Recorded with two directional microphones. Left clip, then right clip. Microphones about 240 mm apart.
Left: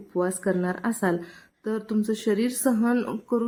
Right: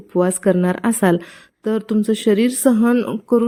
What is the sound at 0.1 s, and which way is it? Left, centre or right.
A woman's voice, right.